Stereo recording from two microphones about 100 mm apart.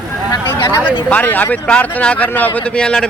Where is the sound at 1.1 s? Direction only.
15° left (ahead or behind).